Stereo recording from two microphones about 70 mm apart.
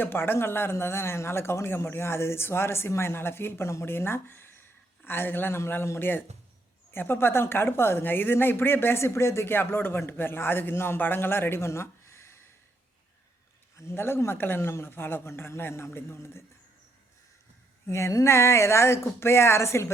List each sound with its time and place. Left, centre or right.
0.0 s a woman's voice: left
13.7 s a woman's voice: left
17.8 s a woman's voice: left